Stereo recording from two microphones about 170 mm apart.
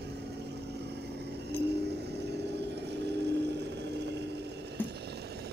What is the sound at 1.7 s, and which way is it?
Vehicle, 80° right.